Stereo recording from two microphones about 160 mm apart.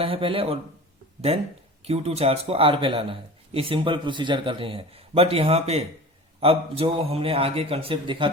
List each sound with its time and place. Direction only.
0.0 s a man's voice: 35° right (ahead or behind)